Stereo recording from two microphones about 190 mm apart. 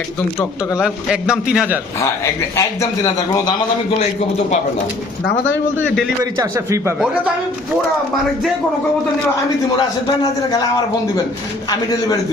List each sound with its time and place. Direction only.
0.8 s a man's voice: 5° right (ahead or behind)
2.0 s a man's voice: 15° left (ahead or behind)
6.3 s speech: 15° right (ahead or behind)
11.9 s a man's voice: 20° left (ahead or behind)